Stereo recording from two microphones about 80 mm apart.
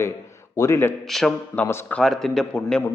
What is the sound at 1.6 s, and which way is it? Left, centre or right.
Speech, left.